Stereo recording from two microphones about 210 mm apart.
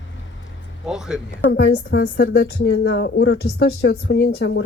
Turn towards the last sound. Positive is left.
turn(degrees=55)  # may be behind; listen again after turning